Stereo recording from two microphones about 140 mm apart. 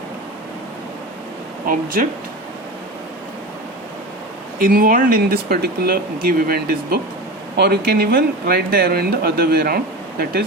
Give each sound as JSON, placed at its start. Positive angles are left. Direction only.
{"t": 1.6, "sound": "speech", "side_deg": -90}
{"t": 4.6, "sound": "speech", "side_deg": -90}